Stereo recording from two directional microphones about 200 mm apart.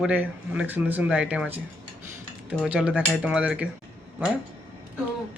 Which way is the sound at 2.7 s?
5° right (ahead or behind).